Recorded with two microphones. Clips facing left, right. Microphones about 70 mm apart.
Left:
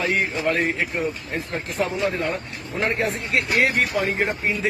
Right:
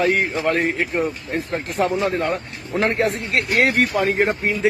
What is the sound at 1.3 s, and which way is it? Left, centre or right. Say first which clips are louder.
Speech: right 4 dB; right.